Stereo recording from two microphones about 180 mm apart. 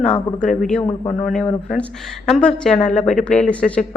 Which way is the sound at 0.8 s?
25° left (ahead or behind).